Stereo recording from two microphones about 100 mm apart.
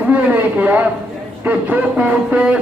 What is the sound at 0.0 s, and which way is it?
A man's voice, 15° right (ahead or behind).